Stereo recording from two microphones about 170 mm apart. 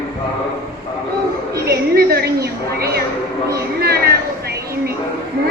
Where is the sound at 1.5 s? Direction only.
65° right (ahead or behind).